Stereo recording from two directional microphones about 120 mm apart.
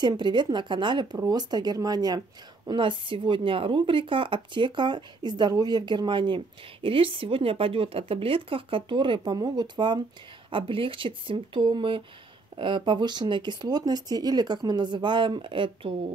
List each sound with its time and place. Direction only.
0.0 s speech: 40° right (ahead or behind)